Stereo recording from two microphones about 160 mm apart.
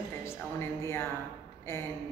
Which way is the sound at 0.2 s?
15° left (ahead or behind).